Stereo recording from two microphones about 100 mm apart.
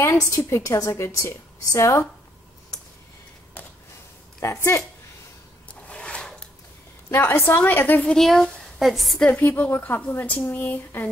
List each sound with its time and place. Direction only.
0.0 s a woman's voice: 30° left (ahead or behind)
4.4 s a woman's voice: 25° left (ahead or behind)
5.9 s a sound: 10° left (ahead or behind)
7.1 s a woman's voice: 25° left (ahead or behind)
8.0 s a woman's voice: 5° left (ahead or behind)
9.3 s speech: 15° left (ahead or behind)